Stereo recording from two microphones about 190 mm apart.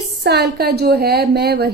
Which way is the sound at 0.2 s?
60° right (ahead or behind).